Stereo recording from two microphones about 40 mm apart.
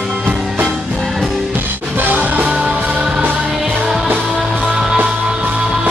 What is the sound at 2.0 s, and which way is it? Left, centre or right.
Music, right.